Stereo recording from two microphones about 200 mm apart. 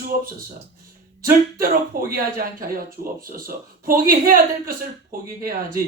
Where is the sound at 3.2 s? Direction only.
45° right (ahead or behind).